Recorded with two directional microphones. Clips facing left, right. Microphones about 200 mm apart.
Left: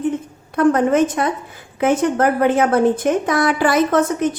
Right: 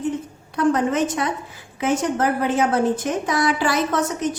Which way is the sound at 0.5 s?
55° left (ahead or behind).